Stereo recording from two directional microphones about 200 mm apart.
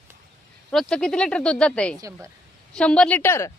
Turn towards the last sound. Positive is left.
turn(degrees=15)  # may be behind; listen again after turning